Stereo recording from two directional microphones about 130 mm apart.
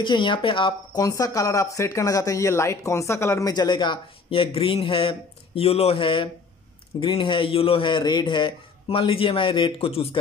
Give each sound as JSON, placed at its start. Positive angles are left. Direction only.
{"t": 0.0, "sound": "a man's voice", "side_deg": 40}
{"t": 1.0, "sound": "a man's voice", "side_deg": 25}